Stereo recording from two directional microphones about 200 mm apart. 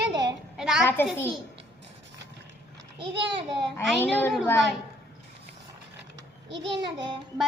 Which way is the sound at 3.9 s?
10° left (ahead or behind).